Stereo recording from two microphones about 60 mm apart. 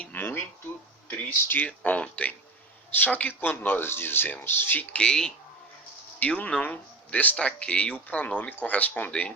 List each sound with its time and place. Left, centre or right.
0.1 s a sound: left
1.5 s speech: left
4.9 s speech: centre
6.1 s speech: left